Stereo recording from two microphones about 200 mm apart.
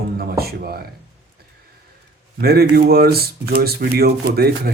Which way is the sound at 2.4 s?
50° right (ahead or behind).